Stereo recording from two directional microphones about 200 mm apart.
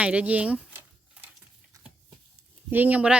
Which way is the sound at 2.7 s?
10° right (ahead or behind).